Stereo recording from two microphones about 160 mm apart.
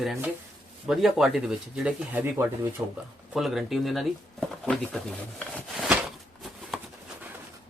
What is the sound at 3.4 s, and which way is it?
Speech, centre (ahead or behind).